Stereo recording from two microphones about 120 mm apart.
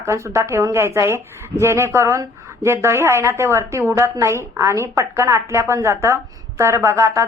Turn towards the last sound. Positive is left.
turn(degrees=-25)  # may be behind; listen again after turning